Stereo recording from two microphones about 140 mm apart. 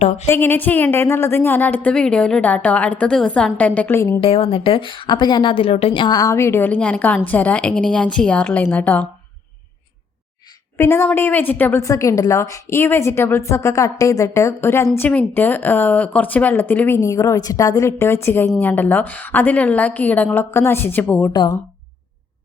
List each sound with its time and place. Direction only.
0.3 s a woman's voice: 15° left (ahead or behind)
4.2 s a woman's voice: 40° left (ahead or behind); by 9.0 s 10° left (ahead or behind)
10.8 s a woman's voice: 15° left (ahead or behind)